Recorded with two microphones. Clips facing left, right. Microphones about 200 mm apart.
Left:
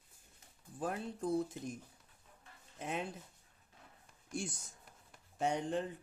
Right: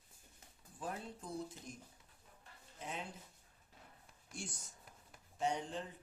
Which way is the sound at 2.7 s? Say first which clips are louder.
Left 6 dB; 60° left (ahead or behind).